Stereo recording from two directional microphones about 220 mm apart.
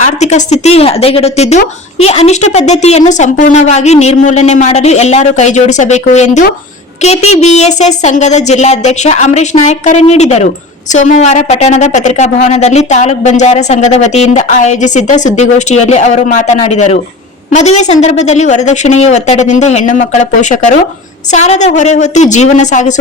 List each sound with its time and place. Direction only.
0.0 s speech: 30° left (ahead or behind)